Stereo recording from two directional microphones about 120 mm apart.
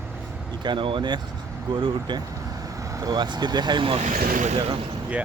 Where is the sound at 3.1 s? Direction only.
35° right (ahead or behind).